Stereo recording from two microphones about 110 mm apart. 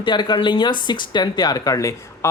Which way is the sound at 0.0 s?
45° left (ahead or behind).